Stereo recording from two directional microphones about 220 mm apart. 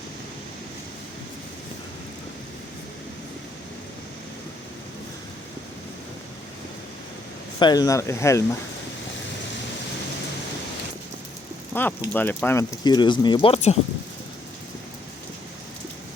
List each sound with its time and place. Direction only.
7.6 s speech: 15° left (ahead or behind)
11.7 s speech: 10° left (ahead or behind); by 13.7 s 25° left (ahead or behind)